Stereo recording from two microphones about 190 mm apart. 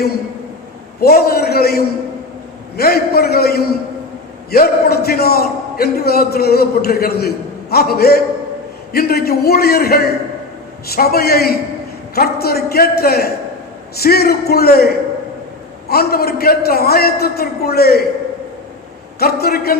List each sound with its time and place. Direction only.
1.0 s a man's voice: 55° left (ahead or behind)
19.2 s a man's voice: 55° left (ahead or behind)